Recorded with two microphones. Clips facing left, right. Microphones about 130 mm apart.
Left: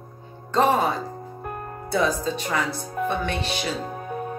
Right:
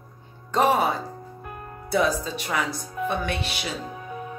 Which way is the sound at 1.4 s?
45° left (ahead or behind).